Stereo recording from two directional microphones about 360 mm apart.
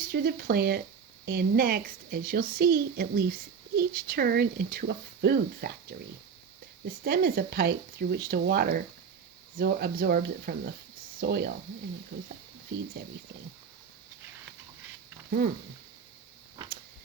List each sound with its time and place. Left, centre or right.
0.0 s a woman's voice: right
6.8 s a woman's voice: right
15.4 s a woman's voice: right